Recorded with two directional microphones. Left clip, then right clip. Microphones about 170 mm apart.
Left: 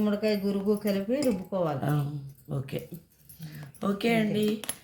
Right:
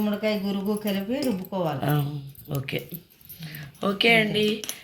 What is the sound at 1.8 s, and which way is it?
Speech, 5° left (ahead or behind).